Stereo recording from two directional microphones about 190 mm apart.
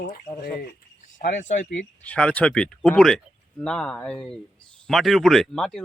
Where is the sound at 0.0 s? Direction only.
50° left (ahead or behind).